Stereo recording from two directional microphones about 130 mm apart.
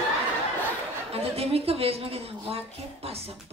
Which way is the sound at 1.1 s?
50° right (ahead or behind).